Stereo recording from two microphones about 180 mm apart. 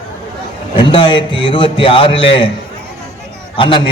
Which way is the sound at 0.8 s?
30° left (ahead or behind).